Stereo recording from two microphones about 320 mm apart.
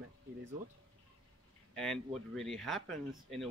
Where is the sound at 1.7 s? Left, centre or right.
Centre.